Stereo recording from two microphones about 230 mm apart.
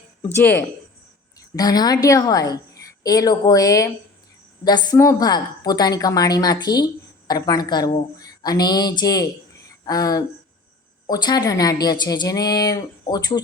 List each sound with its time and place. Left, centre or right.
1.4 s a woman's voice: centre